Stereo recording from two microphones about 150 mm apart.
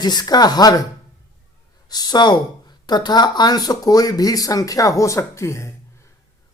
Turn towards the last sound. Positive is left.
turn(degrees=20)  # may be behind; listen again after turning